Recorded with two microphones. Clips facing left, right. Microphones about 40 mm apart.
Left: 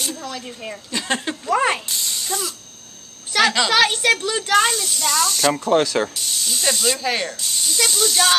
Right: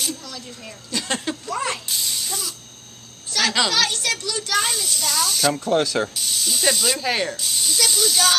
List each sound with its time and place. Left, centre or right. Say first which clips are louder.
0.2 s a child's voice: left 6 dB; left
0.9 s speech: left 2 dB; centre
1.5 s a child's voice: left 8 dB; left
1.9 s a sound: left 1 dB; centre
3.3 s a child's voice: left 4 dB; left
4.6 s speech: left 5 dB; centre
5.6 s speech: left 4 dB; centre
5.9 s speech: left 2 dB; centre